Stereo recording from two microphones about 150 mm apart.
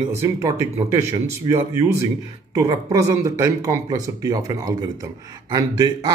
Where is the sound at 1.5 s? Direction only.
20° right (ahead or behind).